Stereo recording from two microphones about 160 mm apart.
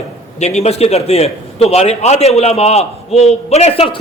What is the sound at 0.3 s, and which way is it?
A man's voice, 45° left (ahead or behind).